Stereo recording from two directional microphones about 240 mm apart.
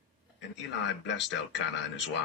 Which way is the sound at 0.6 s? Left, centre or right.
Left.